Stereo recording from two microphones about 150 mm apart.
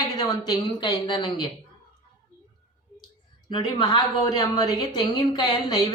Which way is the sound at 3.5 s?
30° left (ahead or behind).